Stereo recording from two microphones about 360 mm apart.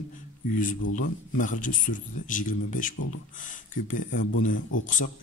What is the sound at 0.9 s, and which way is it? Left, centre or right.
A man's voice, left.